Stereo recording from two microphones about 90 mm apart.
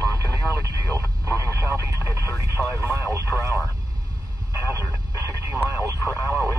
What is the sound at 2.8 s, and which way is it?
Vehicle, 30° right (ahead or behind).